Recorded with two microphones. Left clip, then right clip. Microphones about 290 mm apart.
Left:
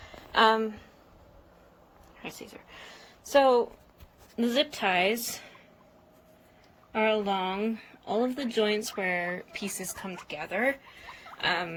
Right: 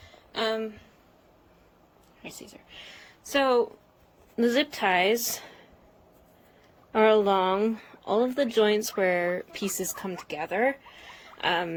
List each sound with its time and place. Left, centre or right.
0.3 s speech: centre
3.0 s a sound: centre
4.4 s speech: centre
6.9 s speech: centre